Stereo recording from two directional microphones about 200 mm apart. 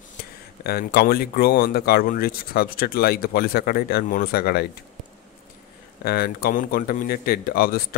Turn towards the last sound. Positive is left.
turn(degrees=45)  # may be behind; listen again after turning